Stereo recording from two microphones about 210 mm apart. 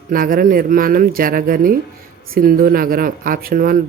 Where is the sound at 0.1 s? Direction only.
45° right (ahead or behind).